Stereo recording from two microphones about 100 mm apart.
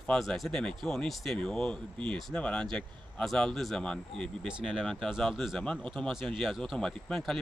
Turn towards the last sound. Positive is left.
turn(degrees=5)  # may be behind; listen again after turning